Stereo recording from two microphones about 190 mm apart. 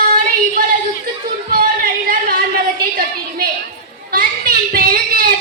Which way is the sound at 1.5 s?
50° right (ahead or behind).